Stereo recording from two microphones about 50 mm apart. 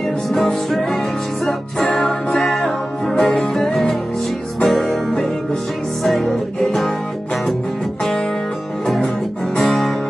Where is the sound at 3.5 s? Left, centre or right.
Centre.